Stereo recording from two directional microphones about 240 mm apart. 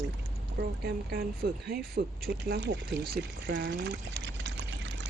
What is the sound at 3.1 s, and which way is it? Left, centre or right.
Pour, right.